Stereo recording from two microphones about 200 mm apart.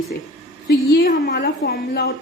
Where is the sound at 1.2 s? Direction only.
55° left (ahead or behind).